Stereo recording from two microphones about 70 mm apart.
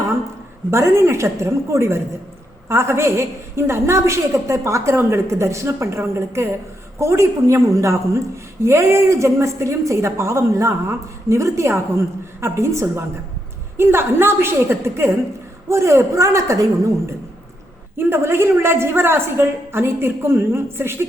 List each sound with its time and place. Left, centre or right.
0.7 s a woman's voice: right
17.9 s a woman's voice: right